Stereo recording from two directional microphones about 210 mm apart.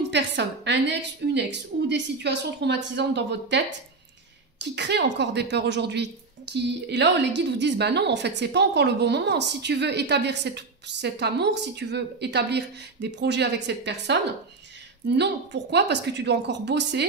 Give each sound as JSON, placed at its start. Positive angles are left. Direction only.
{"t": 0.1, "sound": "a woman's voice", "side_deg": -55}